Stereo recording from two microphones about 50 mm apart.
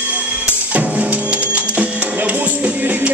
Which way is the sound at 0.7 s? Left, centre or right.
Right.